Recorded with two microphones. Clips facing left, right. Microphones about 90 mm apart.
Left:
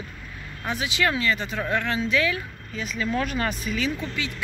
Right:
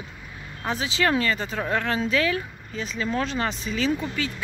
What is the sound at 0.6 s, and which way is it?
Speech, 30° right (ahead or behind).